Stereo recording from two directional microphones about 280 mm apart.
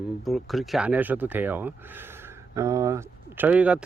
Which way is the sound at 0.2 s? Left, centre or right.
Centre.